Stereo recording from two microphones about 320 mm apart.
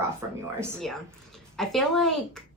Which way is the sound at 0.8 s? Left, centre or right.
Centre.